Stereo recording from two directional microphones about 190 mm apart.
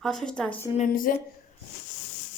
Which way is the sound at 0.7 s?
40° left (ahead or behind).